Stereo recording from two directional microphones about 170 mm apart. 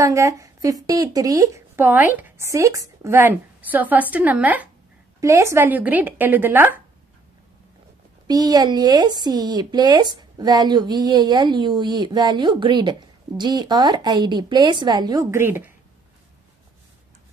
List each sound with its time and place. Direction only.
0.0 s a woman's voice: 20° right (ahead or behind)
8.3 s a woman's voice: 25° right (ahead or behind)